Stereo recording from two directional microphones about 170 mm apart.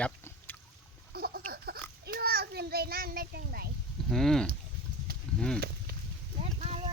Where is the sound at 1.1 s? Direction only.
65° right (ahead or behind).